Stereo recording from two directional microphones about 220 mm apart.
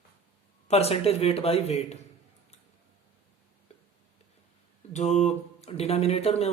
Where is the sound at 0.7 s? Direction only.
30° left (ahead or behind).